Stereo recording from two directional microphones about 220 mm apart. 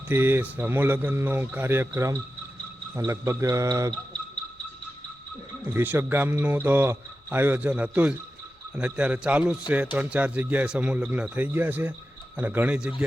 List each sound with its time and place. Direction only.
0.1 s a man's voice: 10° right (ahead or behind)
5.6 s a man's voice: 10° right (ahead or behind)